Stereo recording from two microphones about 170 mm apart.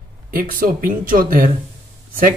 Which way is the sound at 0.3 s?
55° right (ahead or behind).